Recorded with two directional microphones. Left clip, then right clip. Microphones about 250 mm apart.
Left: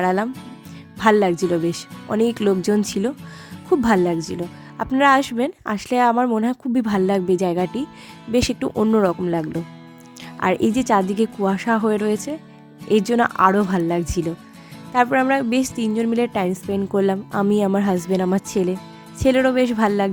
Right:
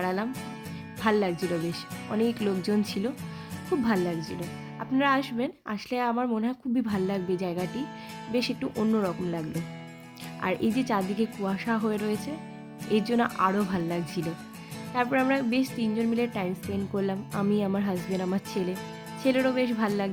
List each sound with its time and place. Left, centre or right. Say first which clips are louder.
0.0 s a woman's voice: left 10 dB; left